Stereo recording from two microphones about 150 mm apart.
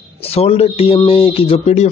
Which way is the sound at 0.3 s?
45° left (ahead or behind).